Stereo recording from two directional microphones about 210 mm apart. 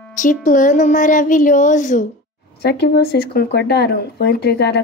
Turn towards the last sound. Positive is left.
turn(degrees=50)  # may be behind; listen again after turning